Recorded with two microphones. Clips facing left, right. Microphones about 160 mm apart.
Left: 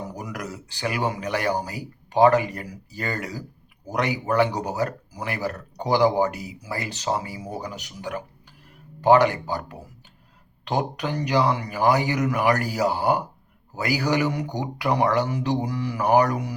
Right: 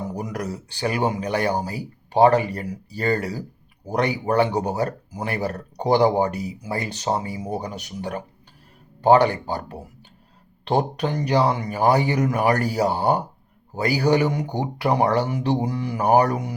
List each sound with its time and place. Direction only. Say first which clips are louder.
0.1 s speech: right 5 dB; 30° right (ahead or behind)